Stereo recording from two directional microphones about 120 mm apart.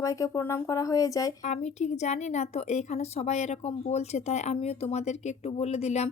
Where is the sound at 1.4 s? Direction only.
75° left (ahead or behind).